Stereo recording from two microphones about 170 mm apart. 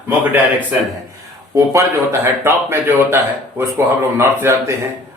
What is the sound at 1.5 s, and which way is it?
A man's voice, 20° right (ahead or behind).